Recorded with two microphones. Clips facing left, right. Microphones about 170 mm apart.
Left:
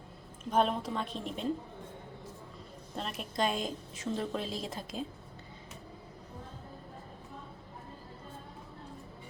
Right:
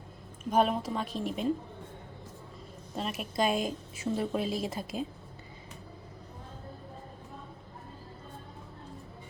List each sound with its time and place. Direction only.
0.5 s a woman's voice: 10° right (ahead or behind)
2.9 s a woman's voice: 5° right (ahead or behind)